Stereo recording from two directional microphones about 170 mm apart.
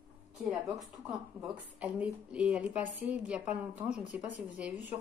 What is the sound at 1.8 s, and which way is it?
A woman's voice, 5° right (ahead or behind).